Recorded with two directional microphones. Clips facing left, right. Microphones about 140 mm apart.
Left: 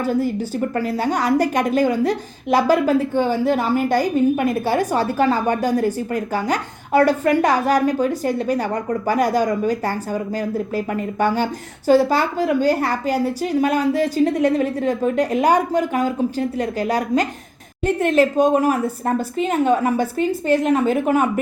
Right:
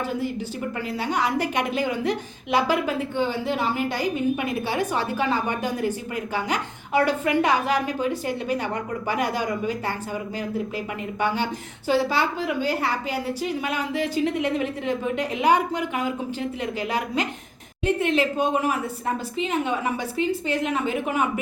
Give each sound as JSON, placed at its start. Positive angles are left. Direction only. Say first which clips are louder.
{"t": 0.0, "sound": "a woman's voice", "louder": "left 7 dB", "side_deg": 40}